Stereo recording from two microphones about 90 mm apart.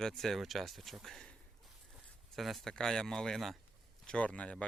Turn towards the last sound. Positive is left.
turn(degrees=15)  # may be behind; listen again after turning